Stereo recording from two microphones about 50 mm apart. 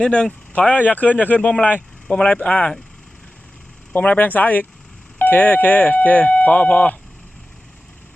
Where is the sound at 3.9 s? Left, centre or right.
Left.